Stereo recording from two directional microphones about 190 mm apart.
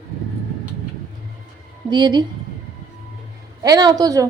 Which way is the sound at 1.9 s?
20° right (ahead or behind).